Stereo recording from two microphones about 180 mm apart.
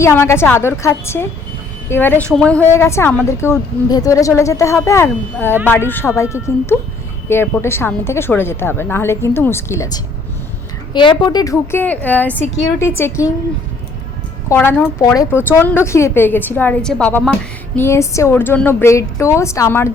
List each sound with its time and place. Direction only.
0.0 s a woman's voice: 15° left (ahead or behind)
14.5 s a woman's voice: 10° left (ahead or behind)